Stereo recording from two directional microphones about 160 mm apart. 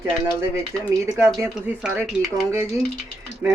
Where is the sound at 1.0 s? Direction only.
20° right (ahead or behind).